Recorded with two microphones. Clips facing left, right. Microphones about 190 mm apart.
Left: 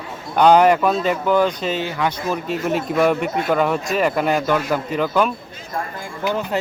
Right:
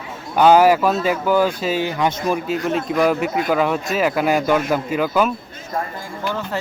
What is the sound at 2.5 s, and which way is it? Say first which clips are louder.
Speech: even; centre (ahead or behind).